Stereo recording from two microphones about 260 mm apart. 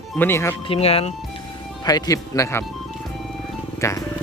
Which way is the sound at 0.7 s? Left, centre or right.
Left.